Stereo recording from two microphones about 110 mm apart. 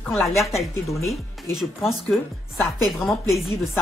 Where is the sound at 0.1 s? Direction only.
Centre (ahead or behind).